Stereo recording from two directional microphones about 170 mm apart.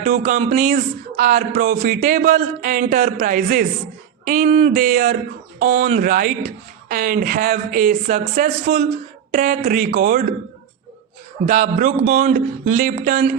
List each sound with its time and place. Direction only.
0.0 s speech: 50° right (ahead or behind)
11.4 s speech: 50° right (ahead or behind)